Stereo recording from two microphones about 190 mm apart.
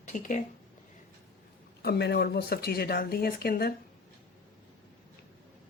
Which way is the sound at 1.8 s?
60° left (ahead or behind).